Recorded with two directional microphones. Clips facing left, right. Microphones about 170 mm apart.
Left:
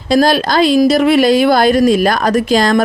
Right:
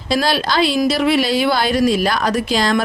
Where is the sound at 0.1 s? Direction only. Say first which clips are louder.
Left 6 dB; 45° left (ahead or behind).